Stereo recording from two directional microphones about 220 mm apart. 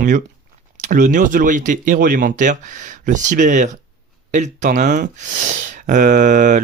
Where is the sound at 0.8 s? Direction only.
35° right (ahead or behind).